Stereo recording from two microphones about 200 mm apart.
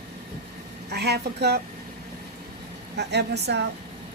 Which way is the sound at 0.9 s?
55° right (ahead or behind).